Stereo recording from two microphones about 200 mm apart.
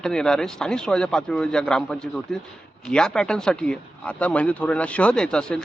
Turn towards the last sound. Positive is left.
turn(degrees=5)  # may be behind; listen again after turning